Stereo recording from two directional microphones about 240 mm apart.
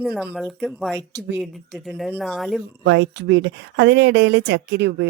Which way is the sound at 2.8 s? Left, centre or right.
Right.